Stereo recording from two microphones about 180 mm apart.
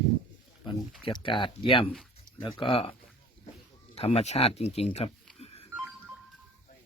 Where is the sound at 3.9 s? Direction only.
35° left (ahead or behind).